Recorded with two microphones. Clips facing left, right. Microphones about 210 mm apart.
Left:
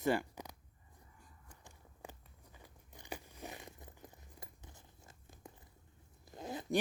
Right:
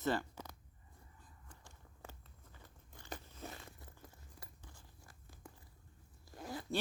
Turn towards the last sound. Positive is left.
turn(degrees=20)  # may be behind; listen again after turning